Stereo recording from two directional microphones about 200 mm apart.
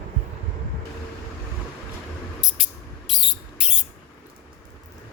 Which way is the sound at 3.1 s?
Centre (ahead or behind).